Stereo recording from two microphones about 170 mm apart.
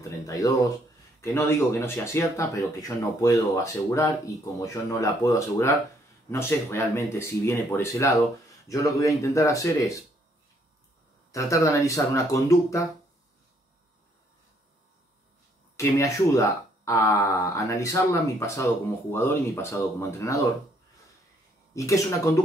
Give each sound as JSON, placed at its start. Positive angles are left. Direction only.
{"t": 0.3, "sound": "speech", "side_deg": 20}
{"t": 11.3, "sound": "speech", "side_deg": 20}
{"t": 15.7, "sound": "speech", "side_deg": 15}
{"t": 21.7, "sound": "speech", "side_deg": 20}